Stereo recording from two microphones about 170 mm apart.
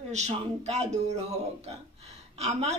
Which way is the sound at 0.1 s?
40° right (ahead or behind).